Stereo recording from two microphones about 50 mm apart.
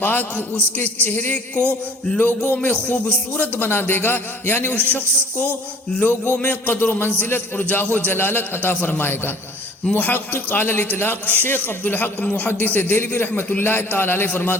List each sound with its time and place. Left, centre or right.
0.0 s a man's voice: left
3.3 s a man's voice: left
4.7 s a man's voice: left
13.6 s a man's voice: left